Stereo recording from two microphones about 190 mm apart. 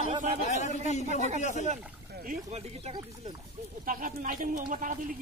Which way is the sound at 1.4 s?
40° left (ahead or behind).